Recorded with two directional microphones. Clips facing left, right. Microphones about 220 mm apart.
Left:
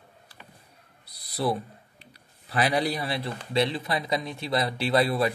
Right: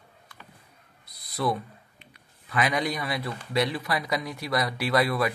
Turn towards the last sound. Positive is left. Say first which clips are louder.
# left 1 dB
turn(degrees=30)  # may be behind; listen again after turning